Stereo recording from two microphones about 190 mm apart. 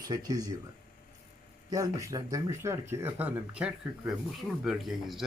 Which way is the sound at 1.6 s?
20° right (ahead or behind).